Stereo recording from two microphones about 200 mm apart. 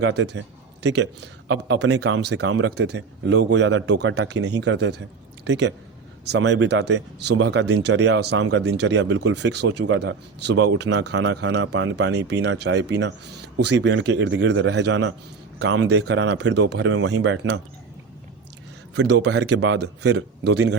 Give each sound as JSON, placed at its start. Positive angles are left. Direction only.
{"t": 0.0, "sound": "speech", "side_deg": -60}
{"t": 18.9, "sound": "speech", "side_deg": -60}
{"t": 19.8, "sound": "speech", "side_deg": -60}